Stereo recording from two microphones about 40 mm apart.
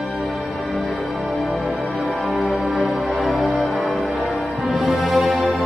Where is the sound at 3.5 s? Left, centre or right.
Centre.